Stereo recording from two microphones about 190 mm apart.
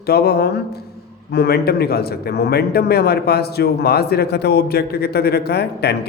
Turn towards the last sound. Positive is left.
turn(degrees=60)  # may be behind; listen again after turning